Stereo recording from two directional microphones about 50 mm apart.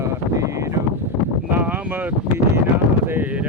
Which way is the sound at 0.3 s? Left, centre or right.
Right.